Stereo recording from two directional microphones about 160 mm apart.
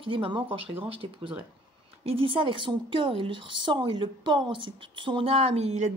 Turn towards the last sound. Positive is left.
turn(degrees=-40)  # may be behind; listen again after turning